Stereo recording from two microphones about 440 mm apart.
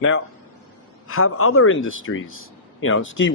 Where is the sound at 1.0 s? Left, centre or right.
Left.